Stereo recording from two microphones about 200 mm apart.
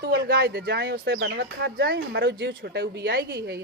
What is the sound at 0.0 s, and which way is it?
Speech, 50° right (ahead or behind).